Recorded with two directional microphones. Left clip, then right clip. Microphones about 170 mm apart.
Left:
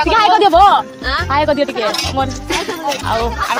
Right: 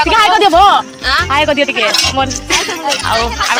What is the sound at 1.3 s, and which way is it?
Speech, 20° right (ahead or behind).